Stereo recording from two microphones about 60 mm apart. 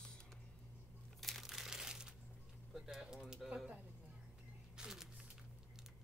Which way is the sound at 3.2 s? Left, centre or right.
Centre.